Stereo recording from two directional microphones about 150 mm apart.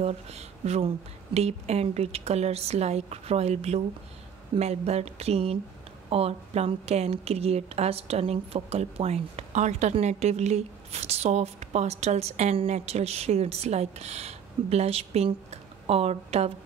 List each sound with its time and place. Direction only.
0.0 s a woman's voice: 45° right (ahead or behind)